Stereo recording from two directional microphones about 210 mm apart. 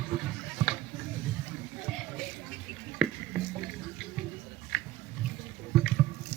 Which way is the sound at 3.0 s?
Centre (ahead or behind).